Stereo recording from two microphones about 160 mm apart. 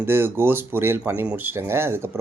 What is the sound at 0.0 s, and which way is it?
Speech, 15° right (ahead or behind).